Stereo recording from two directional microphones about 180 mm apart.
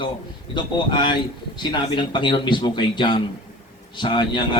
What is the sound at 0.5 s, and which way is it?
Speech, 25° left (ahead or behind).